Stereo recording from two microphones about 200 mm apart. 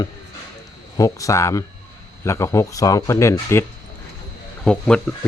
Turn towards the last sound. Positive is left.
turn(degrees=5)  # may be behind; listen again after turning